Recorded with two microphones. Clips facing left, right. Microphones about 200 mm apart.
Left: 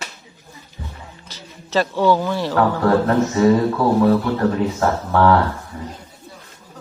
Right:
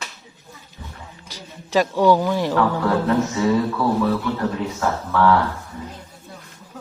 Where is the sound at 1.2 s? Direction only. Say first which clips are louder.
Right 1 dB; 10° right (ahead or behind).